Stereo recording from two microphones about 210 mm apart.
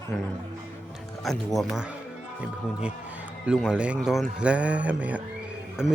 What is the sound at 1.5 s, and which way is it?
A man's voice, centre (ahead or behind).